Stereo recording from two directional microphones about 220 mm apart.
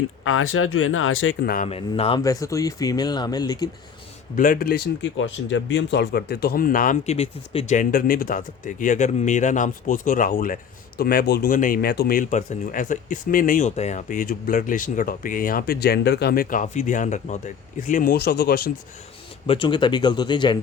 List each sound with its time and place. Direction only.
0.3 s speech: 70° left (ahead or behind)
1.5 s speech: 35° left (ahead or behind); by 3.7 s 20° left (ahead or behind)
4.4 s speech: 40° left (ahead or behind)
19.5 s speech: 20° left (ahead or behind)